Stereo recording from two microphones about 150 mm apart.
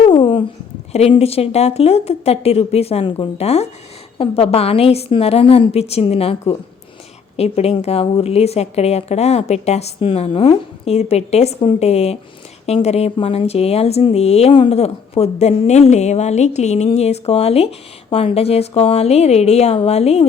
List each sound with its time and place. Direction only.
0.0 s a sound: 35° left (ahead or behind)
0.9 s a woman's voice: 45° left (ahead or behind)
7.3 s speech: 45° left (ahead or behind)